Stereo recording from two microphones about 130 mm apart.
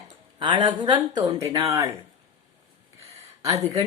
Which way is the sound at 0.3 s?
35° right (ahead or behind).